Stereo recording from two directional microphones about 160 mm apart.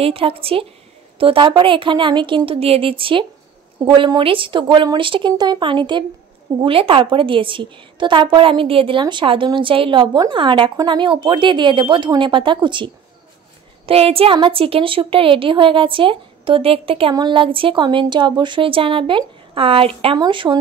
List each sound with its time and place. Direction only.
0.0 s a woman's voice: 35° right (ahead or behind)